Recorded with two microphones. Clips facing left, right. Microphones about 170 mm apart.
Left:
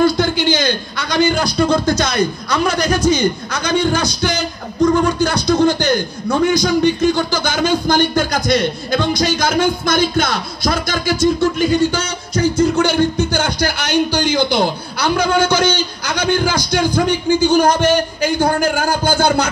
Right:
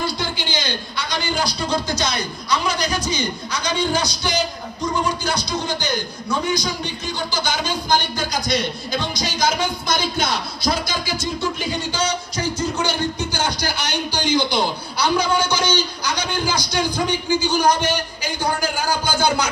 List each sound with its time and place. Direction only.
0.0 s a man's voice: 50° left (ahead or behind)